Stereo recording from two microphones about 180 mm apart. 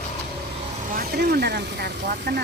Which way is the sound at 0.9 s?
55° right (ahead or behind).